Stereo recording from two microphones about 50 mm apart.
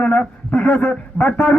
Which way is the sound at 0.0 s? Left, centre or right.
Left.